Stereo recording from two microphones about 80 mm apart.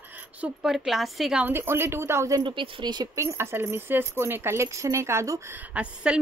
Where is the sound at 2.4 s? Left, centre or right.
Right.